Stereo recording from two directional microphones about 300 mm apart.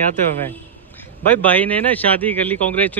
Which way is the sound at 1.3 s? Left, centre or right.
Centre.